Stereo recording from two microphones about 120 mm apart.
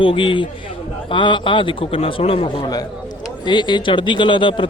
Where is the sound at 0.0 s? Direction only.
45° left (ahead or behind).